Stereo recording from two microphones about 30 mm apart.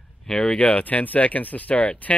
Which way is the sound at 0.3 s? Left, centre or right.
Left.